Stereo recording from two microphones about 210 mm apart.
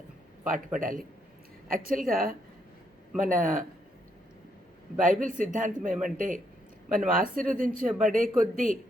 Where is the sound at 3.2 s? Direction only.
40° right (ahead or behind).